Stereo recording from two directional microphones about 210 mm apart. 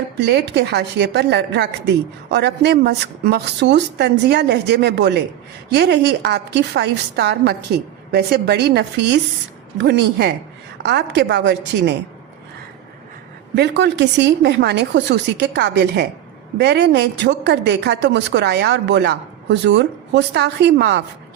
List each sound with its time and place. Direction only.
0.2 s a woman's voice: 55° right (ahead or behind)
13.6 s a woman's voice: 55° right (ahead or behind)